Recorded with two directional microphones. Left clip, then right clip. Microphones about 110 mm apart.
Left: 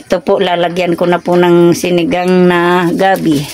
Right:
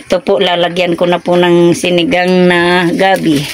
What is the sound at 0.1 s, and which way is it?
Speech, centre (ahead or behind).